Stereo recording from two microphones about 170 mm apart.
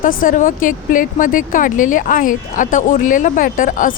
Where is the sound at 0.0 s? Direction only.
55° left (ahead or behind).